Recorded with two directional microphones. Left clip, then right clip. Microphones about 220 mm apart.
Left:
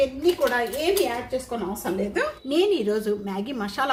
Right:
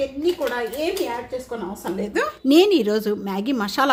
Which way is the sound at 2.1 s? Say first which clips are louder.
Right 11 dB; 45° right (ahead or behind).